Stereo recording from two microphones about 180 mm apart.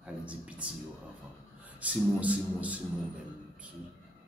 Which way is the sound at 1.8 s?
10° right (ahead or behind).